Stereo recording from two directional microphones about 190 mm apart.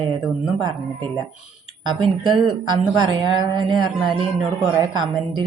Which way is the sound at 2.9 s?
25° right (ahead or behind).